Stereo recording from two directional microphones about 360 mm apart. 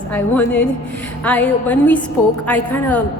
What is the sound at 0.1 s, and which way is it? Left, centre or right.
A woman's voice, centre.